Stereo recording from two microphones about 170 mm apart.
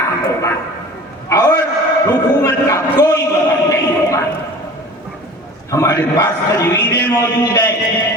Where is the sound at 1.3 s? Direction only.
20° left (ahead or behind).